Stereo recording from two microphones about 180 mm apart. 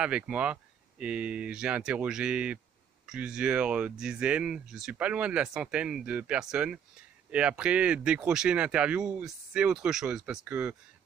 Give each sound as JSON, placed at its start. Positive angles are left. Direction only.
{"t": 0.0, "sound": "speech", "side_deg": -5}